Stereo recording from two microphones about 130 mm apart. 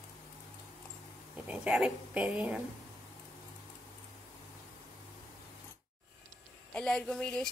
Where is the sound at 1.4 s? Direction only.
10° right (ahead or behind).